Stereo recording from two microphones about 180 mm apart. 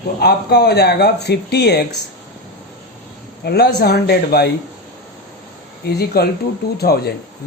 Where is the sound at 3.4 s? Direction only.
65° left (ahead or behind).